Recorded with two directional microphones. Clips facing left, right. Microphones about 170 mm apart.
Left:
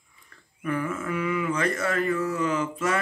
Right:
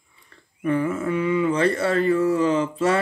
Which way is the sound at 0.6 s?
30° right (ahead or behind).